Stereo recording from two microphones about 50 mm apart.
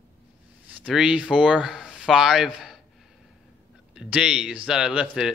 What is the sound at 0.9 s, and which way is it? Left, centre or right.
Speech, centre.